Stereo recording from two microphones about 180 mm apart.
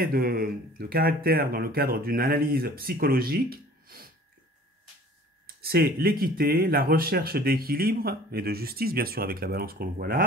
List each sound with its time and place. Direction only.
0.0 s speech: 55° right (ahead or behind)
5.6 s speech: 60° right (ahead or behind)